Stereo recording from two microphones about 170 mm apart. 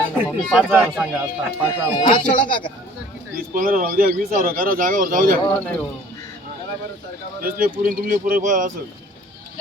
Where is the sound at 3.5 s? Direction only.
50° right (ahead or behind).